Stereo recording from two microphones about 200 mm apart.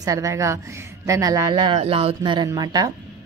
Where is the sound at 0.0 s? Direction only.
15° right (ahead or behind).